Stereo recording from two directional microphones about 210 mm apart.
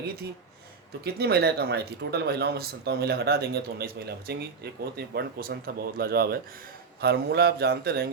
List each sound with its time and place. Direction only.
1.0 s speech: 50° right (ahead or behind)